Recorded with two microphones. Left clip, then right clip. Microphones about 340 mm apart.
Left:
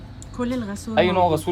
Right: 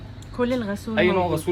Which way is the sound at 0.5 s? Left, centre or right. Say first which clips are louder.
Right 3 dB; centre.